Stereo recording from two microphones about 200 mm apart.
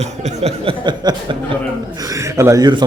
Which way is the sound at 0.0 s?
35° right (ahead or behind).